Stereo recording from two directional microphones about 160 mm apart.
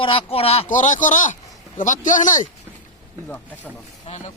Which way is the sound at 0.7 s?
50° left (ahead or behind).